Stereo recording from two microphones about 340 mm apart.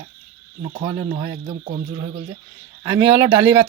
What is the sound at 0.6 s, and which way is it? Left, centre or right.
A man's voice, centre.